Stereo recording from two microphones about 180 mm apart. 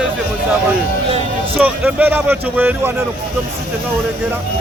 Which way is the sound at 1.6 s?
10° right (ahead or behind).